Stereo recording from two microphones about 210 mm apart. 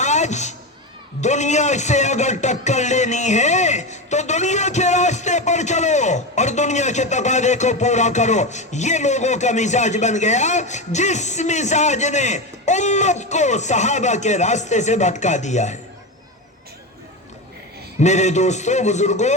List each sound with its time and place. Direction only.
0.0 s a sound: 35° left (ahead or behind)
1.2 s a man's voice: 35° left (ahead or behind)
18.0 s a man's voice: 35° left (ahead or behind)